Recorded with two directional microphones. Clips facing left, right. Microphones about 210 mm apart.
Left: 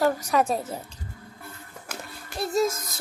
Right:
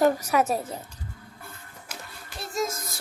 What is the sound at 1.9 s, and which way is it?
Children playing, 55° left (ahead or behind).